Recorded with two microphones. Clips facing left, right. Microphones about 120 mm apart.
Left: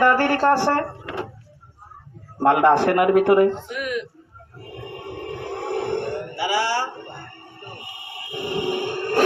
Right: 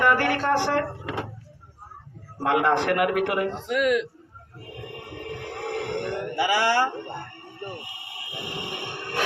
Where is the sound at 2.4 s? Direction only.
40° left (ahead or behind).